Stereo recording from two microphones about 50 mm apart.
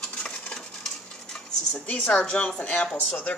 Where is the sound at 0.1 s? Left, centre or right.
Left.